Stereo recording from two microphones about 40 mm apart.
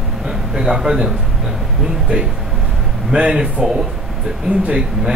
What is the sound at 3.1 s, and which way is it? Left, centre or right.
Speech, right.